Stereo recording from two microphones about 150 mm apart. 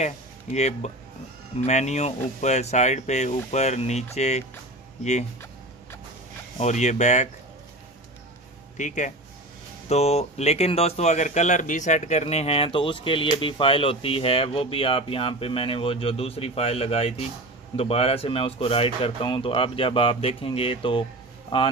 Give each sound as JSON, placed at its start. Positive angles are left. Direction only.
{"t": 0.0, "sound": "speech", "side_deg": 50}
{"t": 6.6, "sound": "speech", "side_deg": 50}
{"t": 8.7, "sound": "speech", "side_deg": 55}
{"t": 9.8, "sound": "speech", "side_deg": 45}